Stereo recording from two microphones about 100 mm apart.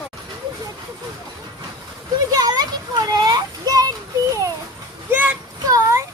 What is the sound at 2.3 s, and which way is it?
Children playing, 40° right (ahead or behind).